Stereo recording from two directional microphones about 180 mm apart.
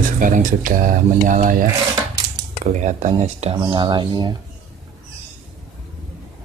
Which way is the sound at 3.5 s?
25° right (ahead or behind).